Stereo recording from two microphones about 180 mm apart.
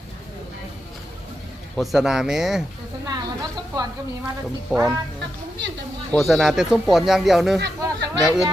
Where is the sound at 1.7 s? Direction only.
Centre (ahead or behind).